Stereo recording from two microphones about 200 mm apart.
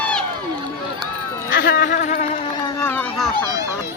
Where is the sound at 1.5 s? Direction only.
50° left (ahead or behind); by 2.7 s 30° left (ahead or behind).